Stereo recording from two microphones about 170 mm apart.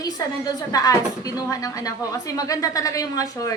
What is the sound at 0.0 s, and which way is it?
A woman's voice, 20° left (ahead or behind).